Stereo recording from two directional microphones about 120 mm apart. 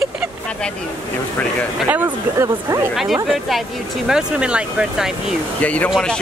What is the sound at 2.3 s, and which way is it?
Speech, 25° right (ahead or behind).